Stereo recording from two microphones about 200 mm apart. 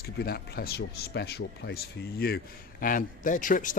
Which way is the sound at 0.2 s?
50° left (ahead or behind).